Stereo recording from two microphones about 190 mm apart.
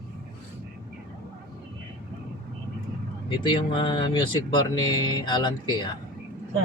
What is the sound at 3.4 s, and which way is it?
Speech, 25° left (ahead or behind).